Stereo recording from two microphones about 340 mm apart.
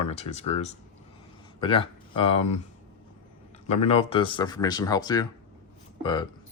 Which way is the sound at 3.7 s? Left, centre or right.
Centre.